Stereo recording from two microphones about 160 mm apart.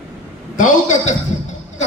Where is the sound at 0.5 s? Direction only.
50° left (ahead or behind).